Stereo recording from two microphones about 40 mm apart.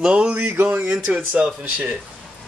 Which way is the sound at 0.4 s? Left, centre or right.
Right.